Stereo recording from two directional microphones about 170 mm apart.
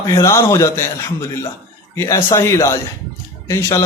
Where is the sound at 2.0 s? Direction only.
15° left (ahead or behind).